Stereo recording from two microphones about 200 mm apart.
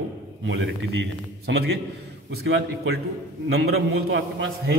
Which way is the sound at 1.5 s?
65° right (ahead or behind).